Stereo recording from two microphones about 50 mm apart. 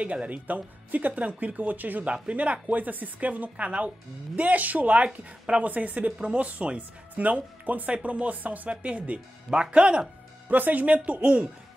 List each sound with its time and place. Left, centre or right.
0.0 s speech: right
10.5 s speech: right